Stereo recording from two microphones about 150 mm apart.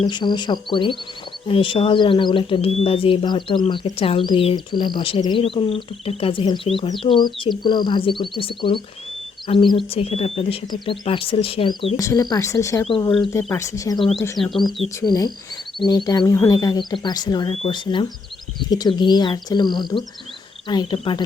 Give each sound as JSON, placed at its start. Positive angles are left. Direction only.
{"t": 0.1, "sound": "speech", "side_deg": 30}
{"t": 11.9, "sound": "speech", "side_deg": 20}
{"t": 14.3, "sound": "speech", "side_deg": 0}
{"t": 15.0, "sound": "speech", "side_deg": 25}